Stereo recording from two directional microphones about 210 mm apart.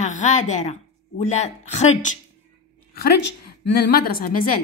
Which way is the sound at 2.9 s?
50° left (ahead or behind).